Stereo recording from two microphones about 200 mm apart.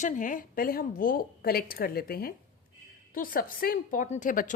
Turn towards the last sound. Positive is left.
turn(degrees=40)  # may be behind; listen again after turning